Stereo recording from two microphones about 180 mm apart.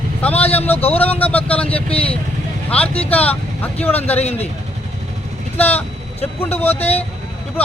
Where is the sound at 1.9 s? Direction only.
30° left (ahead or behind).